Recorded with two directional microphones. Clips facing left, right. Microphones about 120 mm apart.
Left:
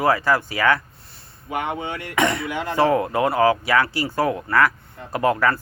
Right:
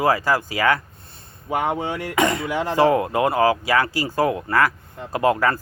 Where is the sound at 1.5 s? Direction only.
35° right (ahead or behind).